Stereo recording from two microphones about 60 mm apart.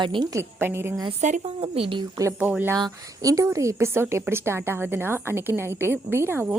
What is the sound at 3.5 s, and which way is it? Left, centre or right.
Speech, right.